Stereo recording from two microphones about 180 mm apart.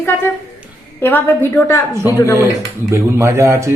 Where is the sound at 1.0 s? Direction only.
10° left (ahead or behind).